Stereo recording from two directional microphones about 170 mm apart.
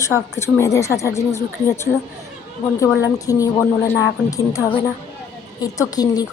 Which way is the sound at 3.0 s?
20° left (ahead or behind).